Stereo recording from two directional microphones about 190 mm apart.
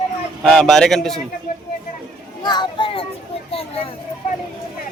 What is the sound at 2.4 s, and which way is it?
Speech, 25° left (ahead or behind).